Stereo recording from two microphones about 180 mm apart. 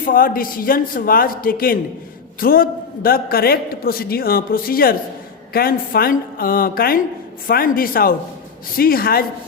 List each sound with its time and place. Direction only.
0.0 s a man's voice: 50° left (ahead or behind)